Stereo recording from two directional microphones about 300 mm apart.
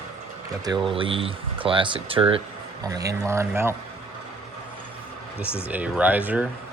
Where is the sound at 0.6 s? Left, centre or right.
Centre.